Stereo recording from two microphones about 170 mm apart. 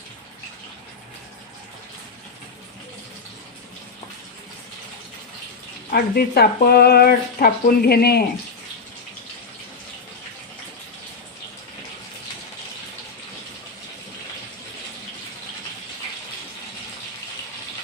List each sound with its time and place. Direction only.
5.9 s speech: 65° left (ahead or behind)